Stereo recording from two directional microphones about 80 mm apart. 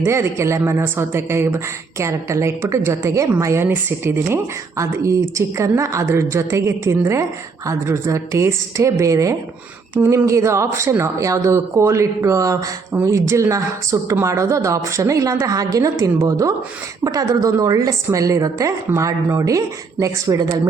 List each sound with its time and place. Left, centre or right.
0.0 s a woman's voice: right
12.9 s a woman's voice: right